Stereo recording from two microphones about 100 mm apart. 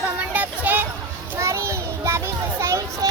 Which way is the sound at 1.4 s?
30° right (ahead or behind).